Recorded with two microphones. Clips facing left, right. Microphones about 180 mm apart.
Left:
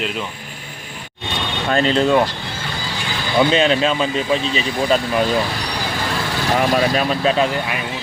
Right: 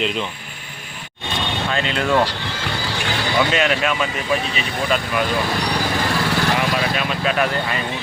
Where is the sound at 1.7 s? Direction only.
35° left (ahead or behind).